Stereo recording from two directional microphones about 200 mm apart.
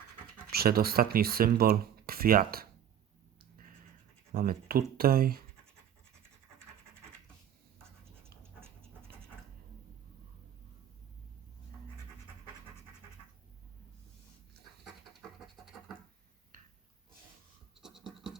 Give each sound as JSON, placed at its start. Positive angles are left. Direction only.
{"t": 0.5, "sound": "speech", "side_deg": -50}
{"t": 4.4, "sound": "speech", "side_deg": -50}
{"t": 17.8, "sound": "scratch", "side_deg": -5}